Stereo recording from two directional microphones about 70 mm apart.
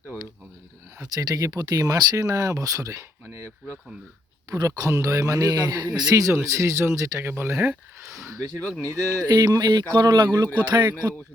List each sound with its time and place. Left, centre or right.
1.0 s speech: right
4.5 s speech: right
6.3 s speech: right
7.3 s speech: right
8.8 s speech: right
9.2 s speech: right